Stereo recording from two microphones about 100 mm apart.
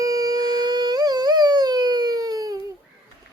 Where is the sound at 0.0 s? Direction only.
40° right (ahead or behind).